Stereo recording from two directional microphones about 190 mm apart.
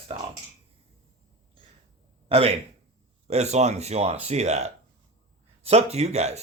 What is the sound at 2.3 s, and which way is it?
Speech, 30° right (ahead or behind).